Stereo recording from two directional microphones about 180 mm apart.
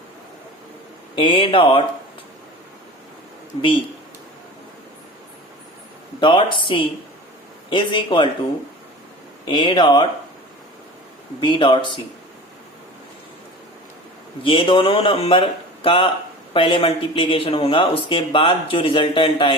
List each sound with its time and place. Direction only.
1.1 s speech: 30° left (ahead or behind)
6.1 s speech: 25° left (ahead or behind)
9.5 s speech: 25° left (ahead or behind)
11.4 s speech: 25° left (ahead or behind)
14.4 s speech: 30° left (ahead or behind)